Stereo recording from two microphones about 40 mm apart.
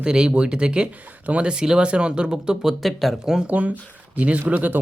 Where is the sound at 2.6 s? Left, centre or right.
Centre.